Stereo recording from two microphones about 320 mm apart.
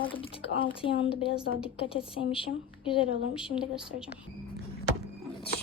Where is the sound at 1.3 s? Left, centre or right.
Centre.